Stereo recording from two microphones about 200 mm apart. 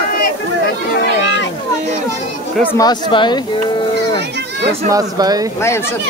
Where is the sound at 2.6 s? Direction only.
15° left (ahead or behind).